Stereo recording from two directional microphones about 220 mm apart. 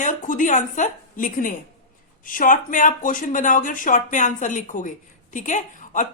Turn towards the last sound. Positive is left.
turn(degrees=35)  # may be behind; listen again after turning